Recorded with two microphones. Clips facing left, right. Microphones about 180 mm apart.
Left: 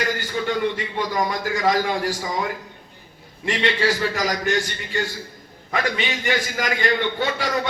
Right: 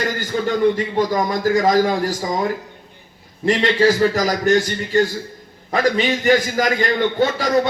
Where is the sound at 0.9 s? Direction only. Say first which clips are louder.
Right 5 dB; 45° right (ahead or behind).